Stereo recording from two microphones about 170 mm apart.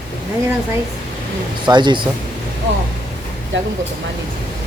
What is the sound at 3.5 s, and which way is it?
Speech, 90° right.